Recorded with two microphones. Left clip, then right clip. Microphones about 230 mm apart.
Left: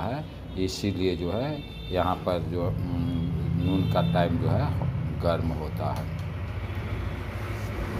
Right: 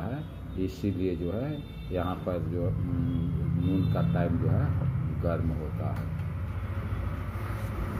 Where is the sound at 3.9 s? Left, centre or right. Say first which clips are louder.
Left 6 dB; centre.